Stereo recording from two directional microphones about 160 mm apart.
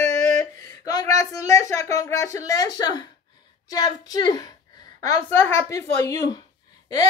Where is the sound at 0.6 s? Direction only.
20° left (ahead or behind).